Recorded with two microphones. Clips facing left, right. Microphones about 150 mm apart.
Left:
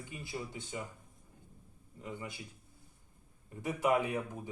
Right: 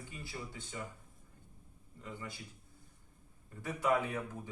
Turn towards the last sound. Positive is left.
turn(degrees=15)  # may be behind; listen again after turning